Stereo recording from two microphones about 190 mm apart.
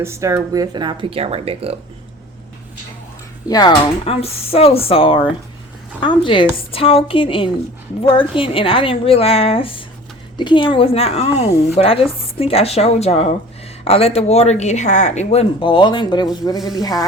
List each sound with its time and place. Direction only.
0.0 s speech: 15° right (ahead or behind); by 1.7 s 30° right (ahead or behind)
3.5 s a woman's voice: 25° left (ahead or behind)